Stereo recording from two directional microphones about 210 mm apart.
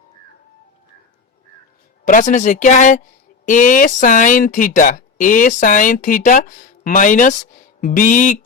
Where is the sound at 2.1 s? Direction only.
35° left (ahead or behind).